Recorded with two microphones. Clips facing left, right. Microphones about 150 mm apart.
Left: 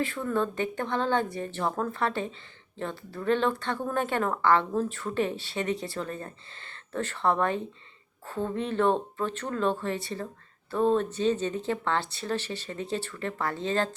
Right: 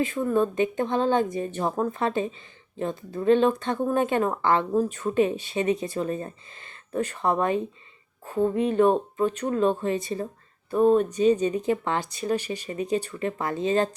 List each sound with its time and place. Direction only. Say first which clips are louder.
0.0 s speech: right 5 dB; 15° right (ahead or behind)